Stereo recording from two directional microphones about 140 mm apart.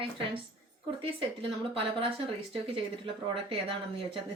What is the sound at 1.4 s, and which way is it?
Speech, 40° right (ahead or behind).